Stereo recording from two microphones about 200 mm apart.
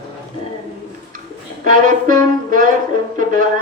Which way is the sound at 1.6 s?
40° right (ahead or behind).